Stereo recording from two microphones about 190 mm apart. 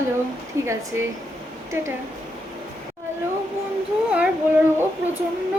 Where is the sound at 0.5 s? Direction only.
15° right (ahead or behind).